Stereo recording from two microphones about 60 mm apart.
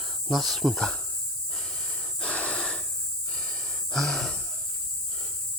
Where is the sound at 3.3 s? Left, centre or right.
Centre.